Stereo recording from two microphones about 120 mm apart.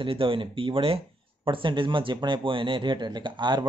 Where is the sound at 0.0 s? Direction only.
50° right (ahead or behind).